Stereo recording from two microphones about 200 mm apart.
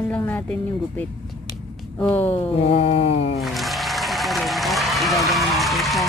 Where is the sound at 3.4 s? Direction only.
Centre (ahead or behind).